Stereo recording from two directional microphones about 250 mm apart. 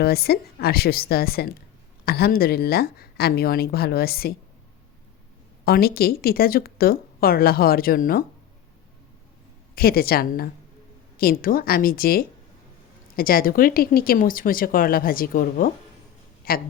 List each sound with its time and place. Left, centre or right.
0.0 s speech: left
5.6 s speech: left
9.7 s speech: left